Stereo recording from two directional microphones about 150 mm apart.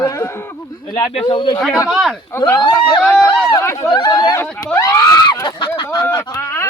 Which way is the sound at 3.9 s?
30° left (ahead or behind).